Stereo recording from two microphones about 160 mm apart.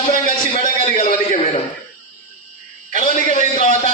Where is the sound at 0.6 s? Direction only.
50° left (ahead or behind).